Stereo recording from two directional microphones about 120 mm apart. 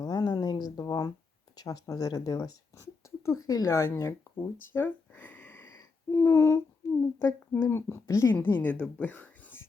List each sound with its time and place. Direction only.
0.0 s a sound: 35° left (ahead or behind)
1.5 s speech: 30° left (ahead or behind); by 5.7 s 15° left (ahead or behind)
5.7 s humming: 20° left (ahead or behind)
7.2 s speech: 20° left (ahead or behind)